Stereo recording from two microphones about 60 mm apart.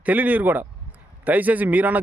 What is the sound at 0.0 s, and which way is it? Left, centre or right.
Speech, right.